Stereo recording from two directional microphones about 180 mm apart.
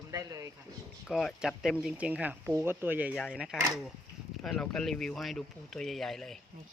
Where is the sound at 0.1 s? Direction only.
20° right (ahead or behind).